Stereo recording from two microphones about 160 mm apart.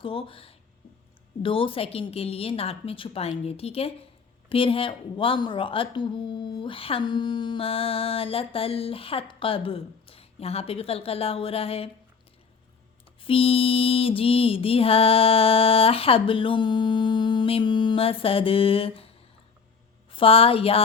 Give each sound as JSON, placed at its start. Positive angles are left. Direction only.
{"t": 0.0, "sound": "a woman's voice", "side_deg": 35}
{"t": 13.2, "sound": "a woman's voice", "side_deg": 35}